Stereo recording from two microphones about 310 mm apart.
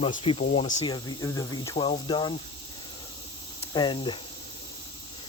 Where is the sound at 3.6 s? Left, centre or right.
Centre.